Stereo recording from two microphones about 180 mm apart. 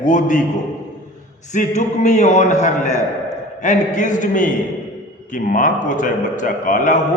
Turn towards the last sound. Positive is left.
turn(degrees=45)  # may be behind; listen again after turning